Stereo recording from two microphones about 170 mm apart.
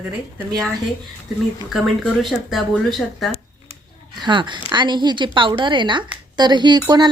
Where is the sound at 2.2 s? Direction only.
Centre (ahead or behind).